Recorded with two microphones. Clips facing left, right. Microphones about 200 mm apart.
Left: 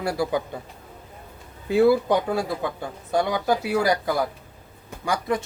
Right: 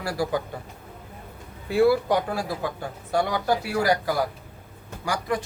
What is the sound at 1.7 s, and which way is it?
Speech, 20° left (ahead or behind).